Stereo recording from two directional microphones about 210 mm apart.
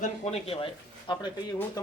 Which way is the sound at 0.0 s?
30° left (ahead or behind).